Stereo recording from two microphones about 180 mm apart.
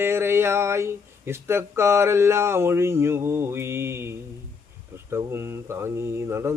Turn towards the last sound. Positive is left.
turn(degrees=-15)  # may be behind; listen again after turning